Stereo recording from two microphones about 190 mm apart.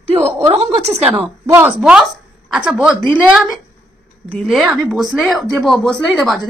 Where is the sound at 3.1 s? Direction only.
5° right (ahead or behind).